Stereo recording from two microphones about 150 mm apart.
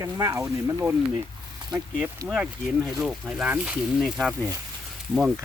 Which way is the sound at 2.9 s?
Centre (ahead or behind).